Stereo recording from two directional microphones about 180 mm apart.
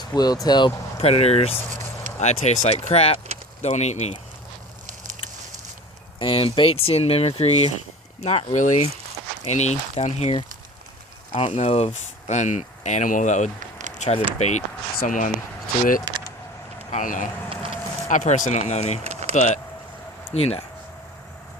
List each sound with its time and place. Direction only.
0.0 s speech: 20° left (ahead or behind); by 4.2 s 40° left (ahead or behind)
6.1 s speech: 30° left (ahead or behind)
13.6 s a sound: 45° right (ahead or behind)
14.0 s speech: 40° left (ahead or behind)
16.9 s speech: 45° left (ahead or behind)
17.7 s a sound: 45° left (ahead or behind)
18.7 s speech: 40° left (ahead or behind)
19.0 s a sound: 35° right (ahead or behind)
20.3 s speech: 35° left (ahead or behind)